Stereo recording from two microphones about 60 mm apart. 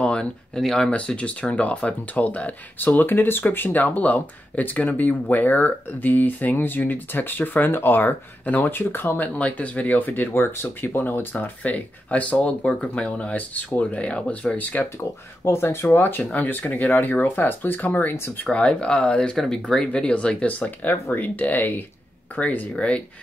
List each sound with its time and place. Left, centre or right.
0.0 s a sound: centre
0.6 s speech: centre
0.8 s speech: centre
15.0 s speech: left
18.1 s speech: left
18.4 s speech: left
19.3 s speech: centre
19.8 s speech: centre
22.8 s speech: centre